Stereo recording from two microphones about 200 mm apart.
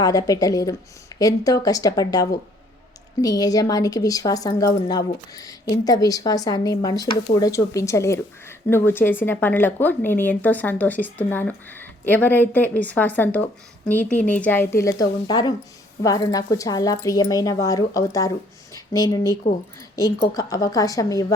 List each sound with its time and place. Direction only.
0.0 s a woman's voice: 20° left (ahead or behind)